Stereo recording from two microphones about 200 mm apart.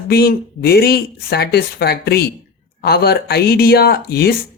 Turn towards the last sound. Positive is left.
turn(degrees=50)  # may be behind; listen again after turning